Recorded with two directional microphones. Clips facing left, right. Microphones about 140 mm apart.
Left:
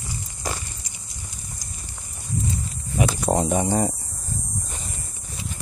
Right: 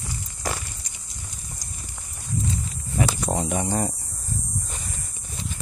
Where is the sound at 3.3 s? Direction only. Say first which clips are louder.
Left 5 dB; 40° left (ahead or behind).